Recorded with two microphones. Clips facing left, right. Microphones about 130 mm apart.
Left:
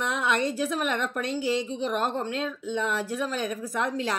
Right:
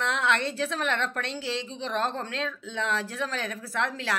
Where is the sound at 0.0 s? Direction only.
15° left (ahead or behind).